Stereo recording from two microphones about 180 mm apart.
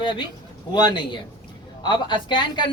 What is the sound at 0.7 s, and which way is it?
Speech, 25° left (ahead or behind).